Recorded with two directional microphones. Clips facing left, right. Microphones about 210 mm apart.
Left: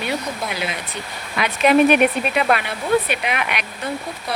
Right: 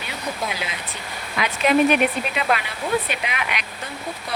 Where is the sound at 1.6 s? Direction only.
60° left (ahead or behind).